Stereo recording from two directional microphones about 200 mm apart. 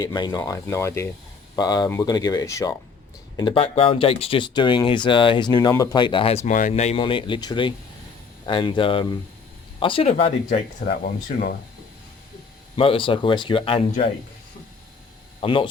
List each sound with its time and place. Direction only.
0.0 s speech: 20° left (ahead or behind)
10.8 s speech: 45° left (ahead or behind)
12.7 s speech: 25° left (ahead or behind)
15.4 s speech: 25° left (ahead or behind)